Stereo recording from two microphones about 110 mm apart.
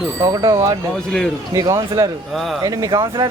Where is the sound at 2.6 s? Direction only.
35° right (ahead or behind).